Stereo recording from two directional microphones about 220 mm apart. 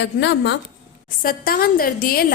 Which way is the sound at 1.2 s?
40° left (ahead or behind).